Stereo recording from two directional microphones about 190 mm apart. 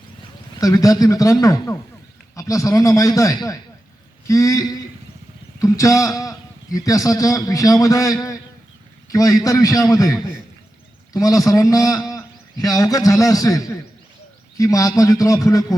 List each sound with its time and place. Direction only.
0.6 s a man's voice: 20° left (ahead or behind)